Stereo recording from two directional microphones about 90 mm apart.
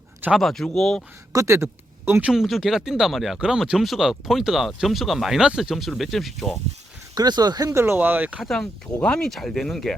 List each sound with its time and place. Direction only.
0.3 s speech: 5° left (ahead or behind)
1.3 s speech: 35° right (ahead or behind)
2.2 s speech: 5° right (ahead or behind)
7.2 s speech: 50° right (ahead or behind)
7.7 s speech: 30° right (ahead or behind)
8.4 s speech: 5° left (ahead or behind)